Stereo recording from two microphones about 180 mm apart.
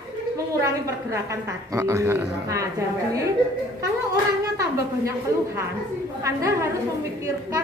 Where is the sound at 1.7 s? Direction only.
15° right (ahead or behind).